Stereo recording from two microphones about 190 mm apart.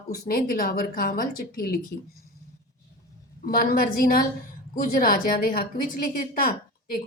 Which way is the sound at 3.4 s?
50° left (ahead or behind).